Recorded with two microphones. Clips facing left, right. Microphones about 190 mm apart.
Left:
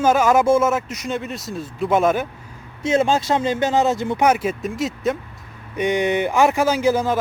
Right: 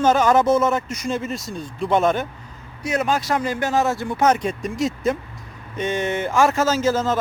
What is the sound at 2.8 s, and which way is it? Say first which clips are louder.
Speech: left 4 dB; 25° left (ahead or behind).